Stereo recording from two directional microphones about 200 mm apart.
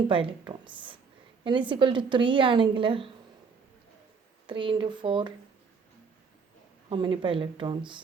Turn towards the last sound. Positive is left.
turn(degrees=-25)  # may be behind; listen again after turning